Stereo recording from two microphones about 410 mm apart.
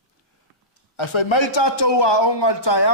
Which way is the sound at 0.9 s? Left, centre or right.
Left.